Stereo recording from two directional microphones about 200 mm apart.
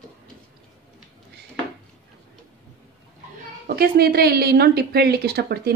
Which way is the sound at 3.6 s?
50° right (ahead or behind).